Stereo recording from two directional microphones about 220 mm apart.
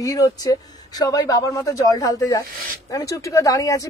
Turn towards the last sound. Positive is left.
turn(degrees=15)  # may be behind; listen again after turning